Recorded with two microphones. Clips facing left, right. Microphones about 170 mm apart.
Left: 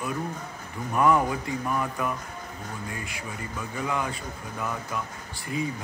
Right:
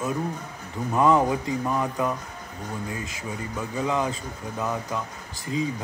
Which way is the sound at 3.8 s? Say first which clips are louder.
Right 4 dB; 25° right (ahead or behind).